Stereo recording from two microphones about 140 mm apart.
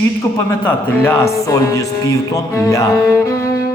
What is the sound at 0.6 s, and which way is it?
Speech, 15° left (ahead or behind).